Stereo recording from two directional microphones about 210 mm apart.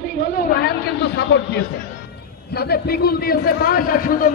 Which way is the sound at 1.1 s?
50° left (ahead or behind).